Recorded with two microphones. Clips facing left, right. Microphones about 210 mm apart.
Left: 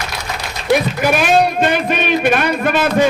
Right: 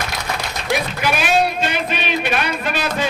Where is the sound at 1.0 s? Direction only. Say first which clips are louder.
Left 5 dB; 50° left (ahead or behind).